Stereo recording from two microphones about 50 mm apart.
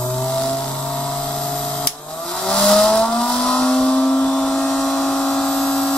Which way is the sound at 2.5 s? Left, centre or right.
Centre.